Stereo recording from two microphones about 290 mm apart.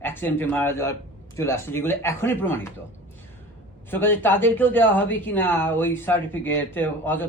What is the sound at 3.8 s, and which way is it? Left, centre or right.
Speech, centre.